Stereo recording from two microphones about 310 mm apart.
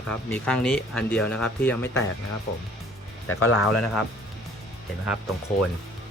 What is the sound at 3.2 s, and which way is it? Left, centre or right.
Speech, left.